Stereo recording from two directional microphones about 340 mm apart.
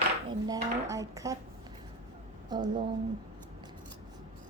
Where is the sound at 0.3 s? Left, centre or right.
Centre.